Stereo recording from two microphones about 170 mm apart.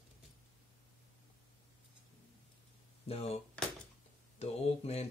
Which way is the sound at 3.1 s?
35° left (ahead or behind).